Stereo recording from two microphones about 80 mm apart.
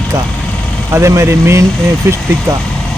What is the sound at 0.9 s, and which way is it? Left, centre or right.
Speech, right.